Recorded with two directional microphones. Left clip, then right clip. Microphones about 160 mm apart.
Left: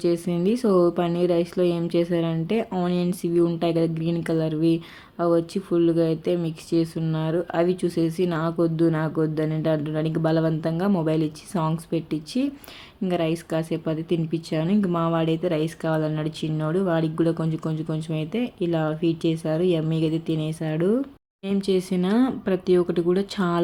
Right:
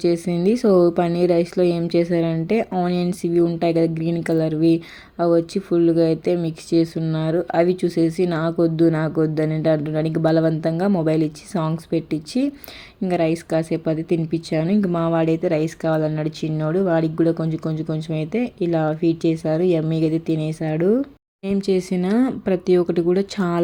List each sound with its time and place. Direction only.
0.0 s speech: 20° right (ahead or behind)